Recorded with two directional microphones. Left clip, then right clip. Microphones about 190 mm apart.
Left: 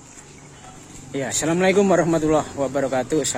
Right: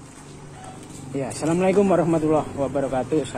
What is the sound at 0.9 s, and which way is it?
Speech, 40° left (ahead or behind).